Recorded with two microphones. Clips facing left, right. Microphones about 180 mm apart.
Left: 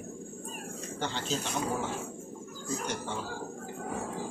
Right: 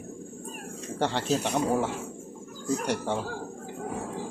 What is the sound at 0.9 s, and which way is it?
Speech, 70° right (ahead or behind).